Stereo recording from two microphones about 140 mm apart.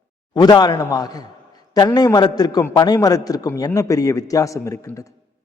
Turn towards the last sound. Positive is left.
turn(degrees=25)  # may be behind; listen again after turning